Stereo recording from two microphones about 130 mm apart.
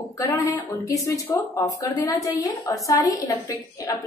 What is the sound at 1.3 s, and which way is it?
Speech, 30° left (ahead or behind).